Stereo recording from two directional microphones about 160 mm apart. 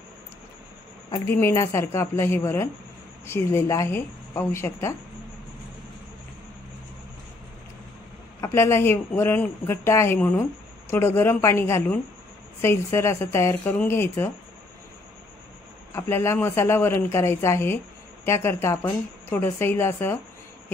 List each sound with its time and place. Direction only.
1.1 s speech: 20° left (ahead or behind)
8.4 s speech: 15° left (ahead or behind)
15.9 s speech: 15° left (ahead or behind)